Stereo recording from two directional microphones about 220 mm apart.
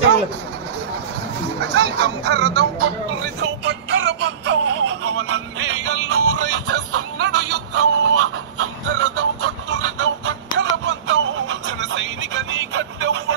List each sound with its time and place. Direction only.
1.6 s speech: 50° right (ahead or behind)
3.4 s music: 55° right (ahead or behind)